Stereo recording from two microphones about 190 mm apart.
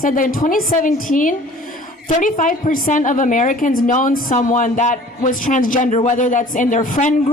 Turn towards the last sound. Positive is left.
turn(degrees=40)  # may be behind; listen again after turning